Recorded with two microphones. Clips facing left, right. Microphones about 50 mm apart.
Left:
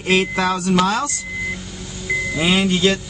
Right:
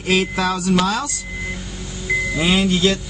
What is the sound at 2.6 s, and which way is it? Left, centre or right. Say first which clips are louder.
Speech: left 1 dB; centre.